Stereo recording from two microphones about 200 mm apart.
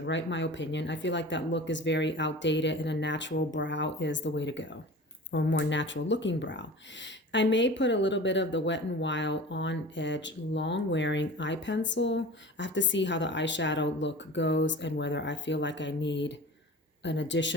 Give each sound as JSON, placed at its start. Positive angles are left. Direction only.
{"t": 0.0, "sound": "speech", "side_deg": 65}